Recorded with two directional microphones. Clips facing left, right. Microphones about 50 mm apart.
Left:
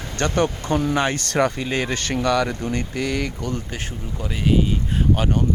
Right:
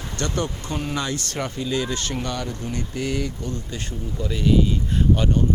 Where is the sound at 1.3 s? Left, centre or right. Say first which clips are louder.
Left 8 dB; left.